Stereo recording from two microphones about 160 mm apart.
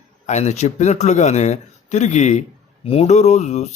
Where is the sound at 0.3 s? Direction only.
45° left (ahead or behind).